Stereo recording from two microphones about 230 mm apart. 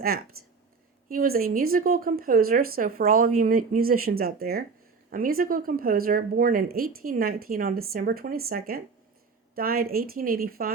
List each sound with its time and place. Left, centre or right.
0.4 s speech: right